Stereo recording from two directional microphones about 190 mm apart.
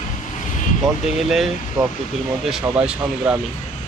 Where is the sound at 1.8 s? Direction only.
20° right (ahead or behind).